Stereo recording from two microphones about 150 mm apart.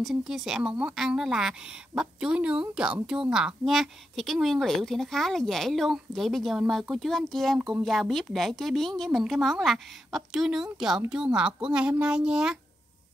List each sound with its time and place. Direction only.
0.0 s speech: 5° right (ahead or behind)